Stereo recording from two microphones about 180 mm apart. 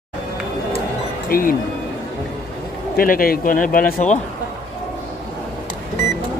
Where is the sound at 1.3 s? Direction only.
55° left (ahead or behind).